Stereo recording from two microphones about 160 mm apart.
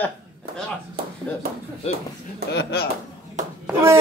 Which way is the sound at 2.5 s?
90° left.